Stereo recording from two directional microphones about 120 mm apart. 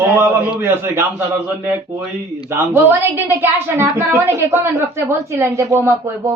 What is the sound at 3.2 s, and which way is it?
A woman's voice, 20° right (ahead or behind).